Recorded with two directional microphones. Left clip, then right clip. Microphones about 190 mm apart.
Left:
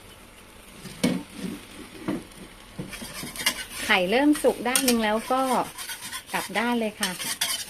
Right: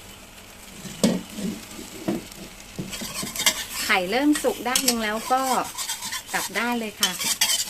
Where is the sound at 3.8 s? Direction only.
15° left (ahead or behind).